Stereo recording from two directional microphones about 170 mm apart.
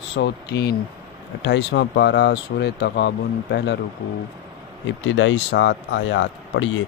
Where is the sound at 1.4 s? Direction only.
90° left.